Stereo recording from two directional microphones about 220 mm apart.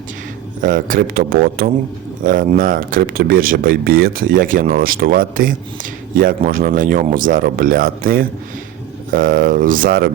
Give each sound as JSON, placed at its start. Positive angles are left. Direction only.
{"t": 0.6, "sound": "speech", "side_deg": -40}